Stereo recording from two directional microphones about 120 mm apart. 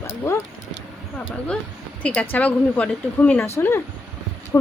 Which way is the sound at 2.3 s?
10° left (ahead or behind).